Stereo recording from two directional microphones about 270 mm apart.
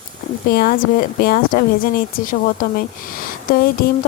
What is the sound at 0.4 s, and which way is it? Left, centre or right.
Speech, left.